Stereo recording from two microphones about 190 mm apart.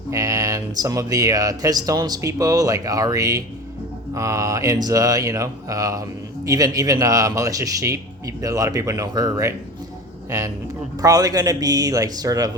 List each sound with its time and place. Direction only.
0.1 s speech: 15° right (ahead or behind)
11.0 s speech: 20° right (ahead or behind)